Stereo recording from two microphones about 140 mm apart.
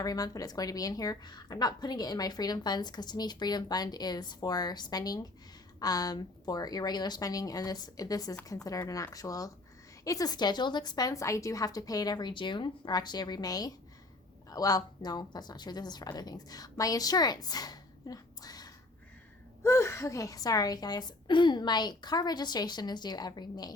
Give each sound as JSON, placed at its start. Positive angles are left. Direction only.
{"t": 0.0, "sound": "a woman's voice", "side_deg": 25}